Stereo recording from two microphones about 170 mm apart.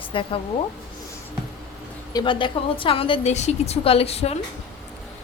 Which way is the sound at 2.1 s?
30° left (ahead or behind).